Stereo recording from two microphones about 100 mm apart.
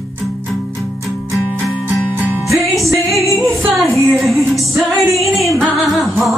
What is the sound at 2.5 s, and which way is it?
Music, centre (ahead or behind).